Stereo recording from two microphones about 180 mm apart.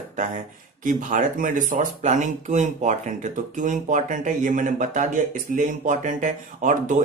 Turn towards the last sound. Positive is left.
turn(degrees=-45)  # may be behind; listen again after turning